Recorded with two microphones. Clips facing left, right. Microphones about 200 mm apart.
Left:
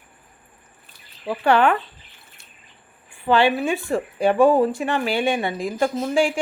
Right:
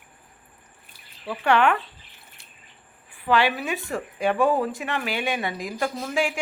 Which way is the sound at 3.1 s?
30° left (ahead or behind).